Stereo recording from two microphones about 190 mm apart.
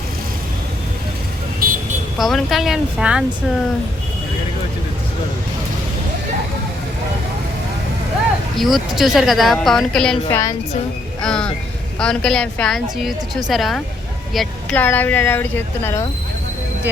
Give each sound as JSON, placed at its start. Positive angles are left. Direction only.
{"t": 1.6, "sound": "vehicle", "side_deg": -50}
{"t": 2.1, "sound": "a woman's voice", "side_deg": 0}
{"t": 8.5, "sound": "a woman's voice", "side_deg": 0}
{"t": 10.2, "sound": "speech", "side_deg": 15}
{"t": 11.2, "sound": "a woman's voice", "side_deg": 5}